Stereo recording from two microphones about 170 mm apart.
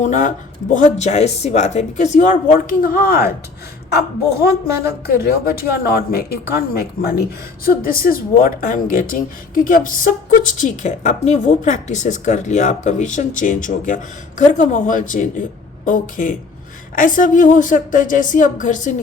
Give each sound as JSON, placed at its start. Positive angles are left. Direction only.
{"t": 0.0, "sound": "a woman's voice", "side_deg": 50}